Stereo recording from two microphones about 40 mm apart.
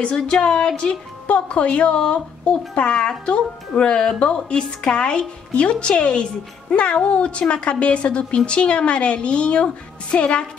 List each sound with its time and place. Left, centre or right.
0.0 s a woman's voice: left
1.2 s a woman's voice: left